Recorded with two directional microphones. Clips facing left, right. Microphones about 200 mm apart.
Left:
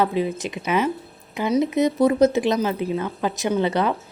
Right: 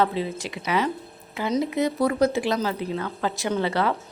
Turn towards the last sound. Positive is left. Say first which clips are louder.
# left 3 dB
turn(degrees=20)  # may be behind; listen again after turning